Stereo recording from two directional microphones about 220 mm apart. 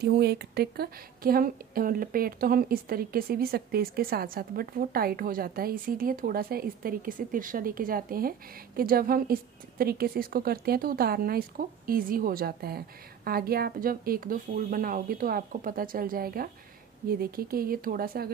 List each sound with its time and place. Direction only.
0.0 s speech: 45° right (ahead or behind)